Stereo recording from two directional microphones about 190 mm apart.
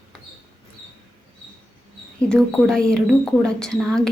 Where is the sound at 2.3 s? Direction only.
5° left (ahead or behind).